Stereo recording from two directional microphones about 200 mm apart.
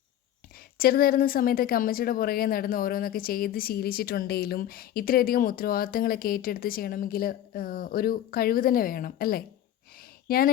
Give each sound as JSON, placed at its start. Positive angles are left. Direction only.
{"t": 0.8, "sound": "speech", "side_deg": 50}